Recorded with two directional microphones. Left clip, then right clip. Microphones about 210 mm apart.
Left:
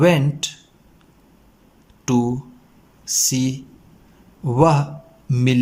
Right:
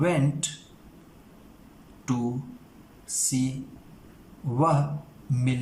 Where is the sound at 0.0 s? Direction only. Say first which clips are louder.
Left 9 dB; 45° left (ahead or behind).